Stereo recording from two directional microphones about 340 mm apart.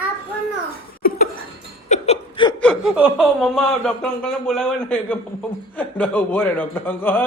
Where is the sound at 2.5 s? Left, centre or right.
Centre.